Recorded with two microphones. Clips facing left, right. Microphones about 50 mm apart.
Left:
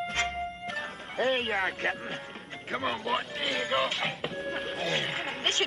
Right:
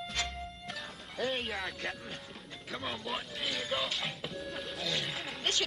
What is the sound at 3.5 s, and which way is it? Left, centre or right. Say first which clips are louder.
Speech: left 6 dB; left.